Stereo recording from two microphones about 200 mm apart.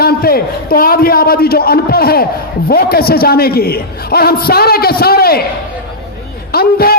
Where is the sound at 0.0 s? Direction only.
50° left (ahead or behind).